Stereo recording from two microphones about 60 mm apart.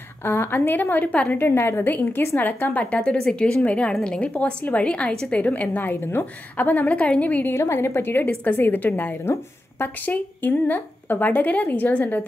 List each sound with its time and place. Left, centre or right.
0.2 s a woman's voice: left
1.5 s a woman's voice: left
7.5 s a woman's voice: left
9.2 s speech: left
10.0 s a woman's voice: left